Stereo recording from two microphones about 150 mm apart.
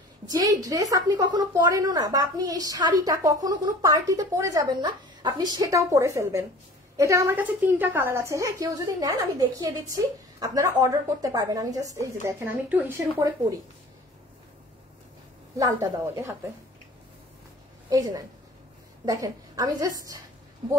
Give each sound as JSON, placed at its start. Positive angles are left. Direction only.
{"t": 0.7, "sound": "a woman's voice", "side_deg": -25}
{"t": 15.5, "sound": "a woman's voice", "side_deg": -20}
{"t": 17.8, "sound": "a woman's voice", "side_deg": -25}